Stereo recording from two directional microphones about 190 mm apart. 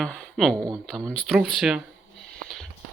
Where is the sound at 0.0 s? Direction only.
5° left (ahead or behind).